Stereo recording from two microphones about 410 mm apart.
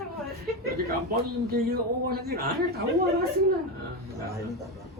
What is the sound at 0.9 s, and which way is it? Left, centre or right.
A man's voice, right.